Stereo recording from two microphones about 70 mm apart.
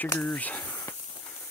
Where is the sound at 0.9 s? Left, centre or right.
Left.